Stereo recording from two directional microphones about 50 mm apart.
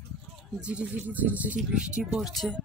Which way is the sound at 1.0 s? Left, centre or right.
Right.